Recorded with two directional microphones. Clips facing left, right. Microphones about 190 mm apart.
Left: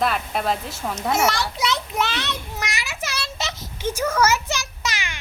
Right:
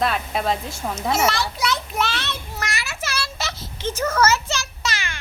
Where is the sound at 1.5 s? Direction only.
20° left (ahead or behind).